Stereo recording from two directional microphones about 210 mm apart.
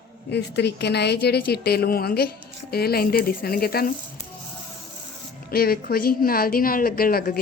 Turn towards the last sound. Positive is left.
turn(degrees=45)  # may be behind; listen again after turning